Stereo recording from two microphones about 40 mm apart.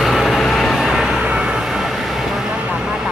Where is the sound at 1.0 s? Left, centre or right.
Centre.